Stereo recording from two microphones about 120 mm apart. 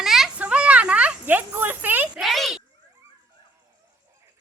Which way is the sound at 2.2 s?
Centre (ahead or behind).